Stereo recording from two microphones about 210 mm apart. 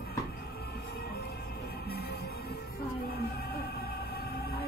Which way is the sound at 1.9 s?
50° left (ahead or behind).